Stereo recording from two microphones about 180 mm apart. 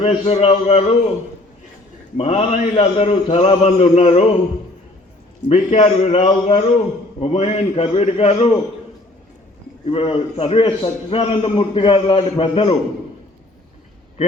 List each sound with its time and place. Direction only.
0.0 s a man's voice: 35° left (ahead or behind)
2.1 s a man's voice: 30° left (ahead or behind)
5.5 s a man's voice: 35° left (ahead or behind)
9.8 s a man's voice: 30° left (ahead or behind)